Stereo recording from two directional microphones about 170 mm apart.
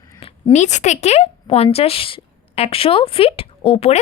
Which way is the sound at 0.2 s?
35° left (ahead or behind).